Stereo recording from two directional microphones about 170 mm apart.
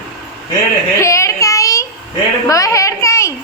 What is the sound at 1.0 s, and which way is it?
Child singing, 15° left (ahead or behind).